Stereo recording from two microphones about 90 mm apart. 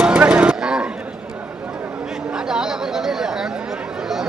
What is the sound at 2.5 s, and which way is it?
Chatter, 5° right (ahead or behind).